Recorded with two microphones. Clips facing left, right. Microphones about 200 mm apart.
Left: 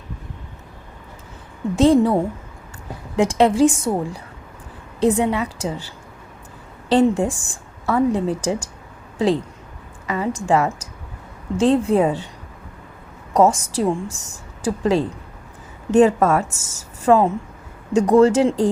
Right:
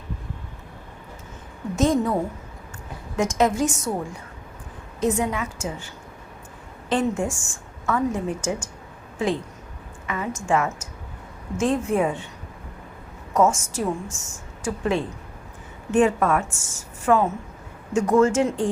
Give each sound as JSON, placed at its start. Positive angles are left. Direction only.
{"t": 1.7, "sound": "a woman's voice", "side_deg": 30}
{"t": 3.2, "sound": "a woman's voice", "side_deg": 30}
{"t": 6.9, "sound": "a woman's voice", "side_deg": 35}
{"t": 13.3, "sound": "a woman's voice", "side_deg": 35}